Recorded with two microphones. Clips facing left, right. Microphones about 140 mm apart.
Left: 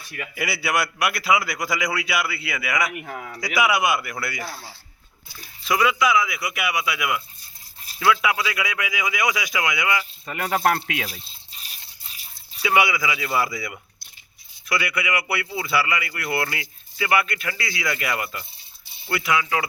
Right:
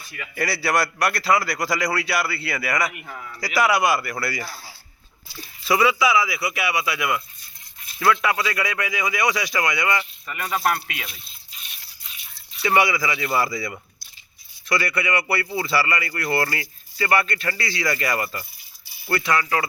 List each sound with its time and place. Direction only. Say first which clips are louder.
0.3 s speech: right 2 dB; 5° left (ahead or behind)
3.0 s speech: left 3 dB; 60° left (ahead or behind)
3.4 s speech: right 1 dB; centre (ahead or behind)
5.6 s speech: right 1 dB; 5° right (ahead or behind)
10.5 s speech: left 2 dB; 85° left
11.0 s drip: left 5 dB; 35° left (ahead or behind)
12.0 s a sound: right 1 dB; 35° left (ahead or behind)
12.6 s speech: right 1 dB; 5° left (ahead or behind)